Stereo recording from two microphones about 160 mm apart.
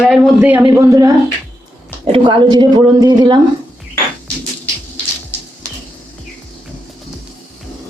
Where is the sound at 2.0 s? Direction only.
35° right (ahead or behind).